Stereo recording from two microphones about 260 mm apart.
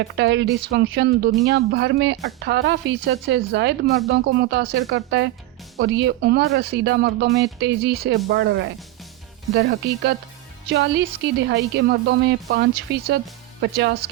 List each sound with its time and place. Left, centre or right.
0.0 s speech: right